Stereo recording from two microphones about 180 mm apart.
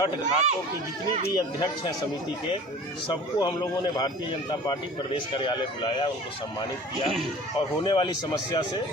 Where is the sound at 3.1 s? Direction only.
25° left (ahead or behind).